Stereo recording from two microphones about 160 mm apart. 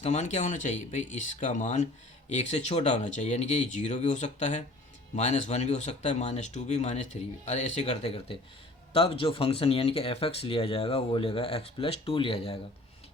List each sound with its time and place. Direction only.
0.0 s speech: 45° left (ahead or behind)